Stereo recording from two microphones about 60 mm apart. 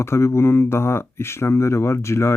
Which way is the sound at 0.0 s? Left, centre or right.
Left.